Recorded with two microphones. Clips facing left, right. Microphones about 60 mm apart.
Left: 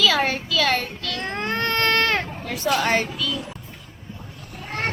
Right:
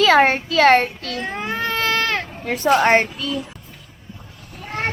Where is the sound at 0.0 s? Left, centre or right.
Right.